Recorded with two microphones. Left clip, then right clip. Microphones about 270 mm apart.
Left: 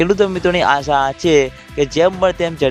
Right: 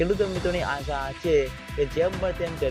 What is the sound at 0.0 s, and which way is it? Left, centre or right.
Speech, left.